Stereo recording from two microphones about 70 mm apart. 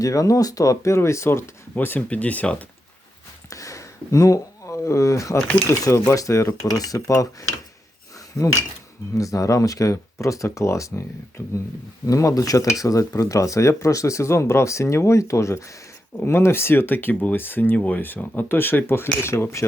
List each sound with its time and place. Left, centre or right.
0.0 s speech: left
1.7 s speech: left
3.5 s a sound: left
5.6 s speech: left
6.7 s speech: left
8.4 s speech: centre
9.1 s speech: left